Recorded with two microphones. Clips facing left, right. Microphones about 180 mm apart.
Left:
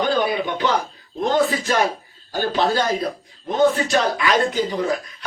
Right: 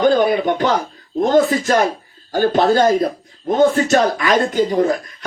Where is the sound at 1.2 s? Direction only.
45° right (ahead or behind).